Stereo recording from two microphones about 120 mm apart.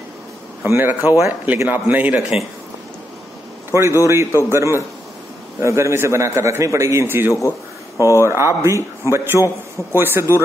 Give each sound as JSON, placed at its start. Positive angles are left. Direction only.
{"t": 0.7, "sound": "a man's voice", "side_deg": -20}
{"t": 4.0, "sound": "a man's voice", "side_deg": -25}